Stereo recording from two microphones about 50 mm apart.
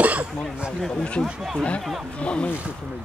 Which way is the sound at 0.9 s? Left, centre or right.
Centre.